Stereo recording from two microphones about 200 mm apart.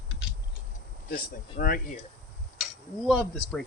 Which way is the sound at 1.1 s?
45° left (ahead or behind).